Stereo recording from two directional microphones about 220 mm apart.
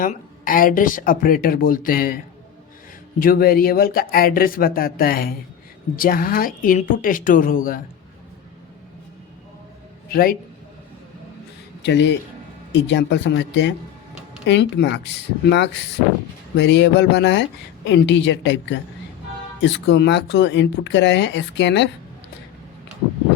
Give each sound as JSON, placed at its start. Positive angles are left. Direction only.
{"t": 0.0, "sound": "speech", "side_deg": 40}
{"t": 10.1, "sound": "a man's voice", "side_deg": 40}
{"t": 11.8, "sound": "speech", "side_deg": 50}